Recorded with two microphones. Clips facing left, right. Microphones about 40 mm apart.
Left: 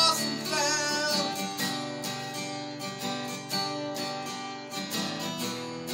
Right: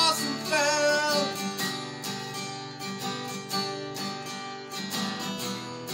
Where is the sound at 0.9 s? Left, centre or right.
Centre.